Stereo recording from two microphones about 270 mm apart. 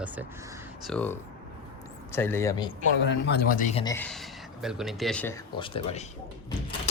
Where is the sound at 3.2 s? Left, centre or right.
Left.